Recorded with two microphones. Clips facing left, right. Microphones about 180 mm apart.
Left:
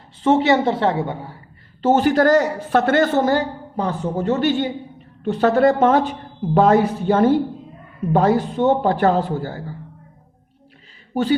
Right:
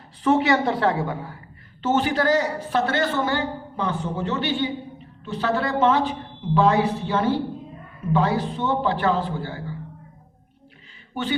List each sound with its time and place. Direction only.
0.2 s a woman's voice: 25° left (ahead or behind)
1.8 s a man's voice: 40° left (ahead or behind)
11.1 s a man's voice: 40° left (ahead or behind)